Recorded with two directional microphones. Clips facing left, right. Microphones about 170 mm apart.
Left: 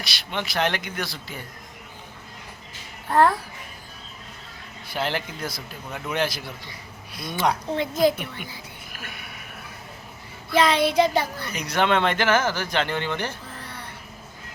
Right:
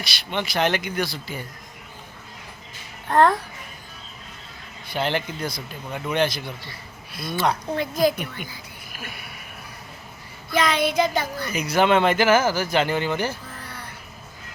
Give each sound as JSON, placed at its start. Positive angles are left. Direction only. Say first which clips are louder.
{"t": 0.0, "sound": "a man's voice", "louder": "right 2 dB", "side_deg": 0}
{"t": 3.1, "sound": "a child's voice", "louder": "right 1 dB", "side_deg": 5}
{"t": 4.9, "sound": "a man's voice", "louder": "right 3 dB", "side_deg": 0}
{"t": 7.2, "sound": "a woman's voice", "louder": "right 1 dB", "side_deg": 15}
{"t": 9.0, "sound": "a sound", "louder": "right 3 dB", "side_deg": -5}
{"t": 10.5, "sound": "child singing", "louder": "left 2 dB", "side_deg": 30}
{"t": 11.5, "sound": "speech", "louder": "right 3 dB", "side_deg": -5}